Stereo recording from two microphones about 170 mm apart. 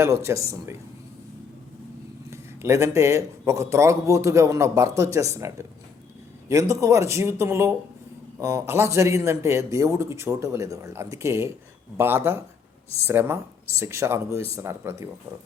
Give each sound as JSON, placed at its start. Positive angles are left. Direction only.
{"t": 0.0, "sound": "speech", "side_deg": -15}
{"t": 2.3, "sound": "speech", "side_deg": -15}